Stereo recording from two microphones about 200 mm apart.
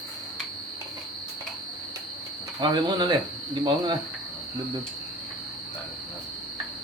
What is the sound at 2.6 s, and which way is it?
Speech, 20° right (ahead or behind).